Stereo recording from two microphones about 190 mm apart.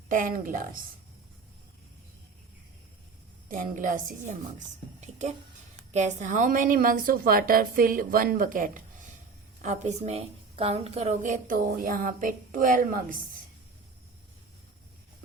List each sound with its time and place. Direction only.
0.1 s a woman's voice: 45° right (ahead or behind)
3.5 s a woman's voice: 45° right (ahead or behind)
5.9 s a woman's voice: 35° right (ahead or behind)